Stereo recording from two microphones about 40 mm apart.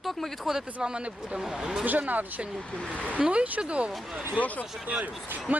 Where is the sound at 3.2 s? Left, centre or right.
Right.